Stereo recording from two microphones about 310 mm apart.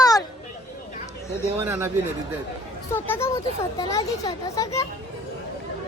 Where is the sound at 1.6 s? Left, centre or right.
Centre.